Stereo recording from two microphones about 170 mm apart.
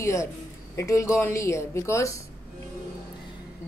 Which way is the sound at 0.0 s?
20° left (ahead or behind).